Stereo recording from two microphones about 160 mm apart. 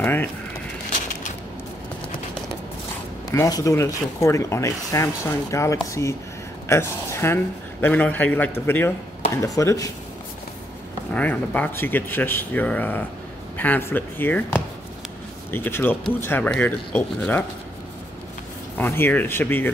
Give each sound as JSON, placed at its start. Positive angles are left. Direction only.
{"t": 0.0, "sound": "a sound", "side_deg": 10}
{"t": 3.3, "sound": "speech", "side_deg": 20}
{"t": 11.1, "sound": "speech", "side_deg": 10}
{"t": 18.8, "sound": "speech", "side_deg": 15}